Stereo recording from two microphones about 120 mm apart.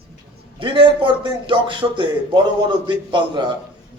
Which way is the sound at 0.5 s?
45° right (ahead or behind).